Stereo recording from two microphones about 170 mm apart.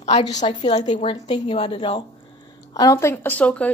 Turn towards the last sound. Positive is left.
turn(degrees=10)  # may be behind; listen again after turning